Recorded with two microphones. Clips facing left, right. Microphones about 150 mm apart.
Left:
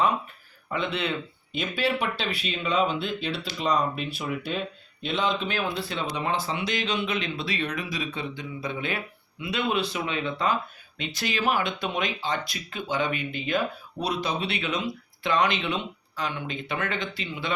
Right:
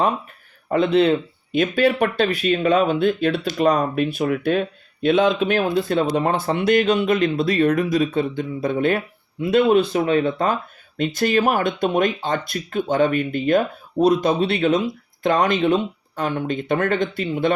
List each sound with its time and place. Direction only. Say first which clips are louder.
0.7 s speech: right 12 dB; 40° right (ahead or behind)
1.5 s speech: right 9 dB; 50° right (ahead or behind)